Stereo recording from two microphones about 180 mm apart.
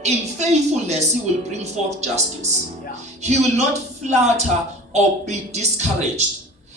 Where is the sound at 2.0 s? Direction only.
40° right (ahead or behind).